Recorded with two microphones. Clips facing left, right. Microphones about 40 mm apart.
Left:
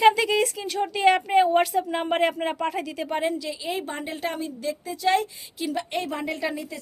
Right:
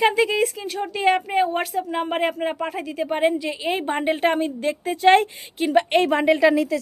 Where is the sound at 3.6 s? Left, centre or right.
Right.